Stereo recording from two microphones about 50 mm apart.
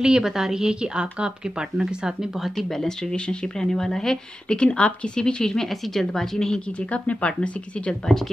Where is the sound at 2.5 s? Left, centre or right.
Centre.